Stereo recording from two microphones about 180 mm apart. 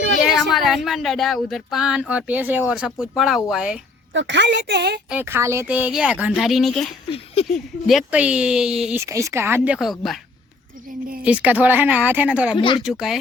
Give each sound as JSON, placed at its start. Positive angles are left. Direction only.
{"t": 0.3, "sound": "speech", "side_deg": 0}
{"t": 4.1, "sound": "a woman's voice", "side_deg": -90}
{"t": 5.0, "sound": "speech", "side_deg": -10}
{"t": 7.4, "sound": "a sound", "side_deg": 35}
{"t": 7.9, "sound": "speech", "side_deg": -5}
{"t": 9.0, "sound": "speech", "side_deg": -15}
{"t": 11.2, "sound": "speech", "side_deg": -5}
{"t": 12.5, "sound": "speech", "side_deg": 25}